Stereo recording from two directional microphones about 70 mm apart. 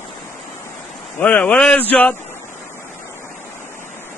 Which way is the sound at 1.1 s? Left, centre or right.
Left.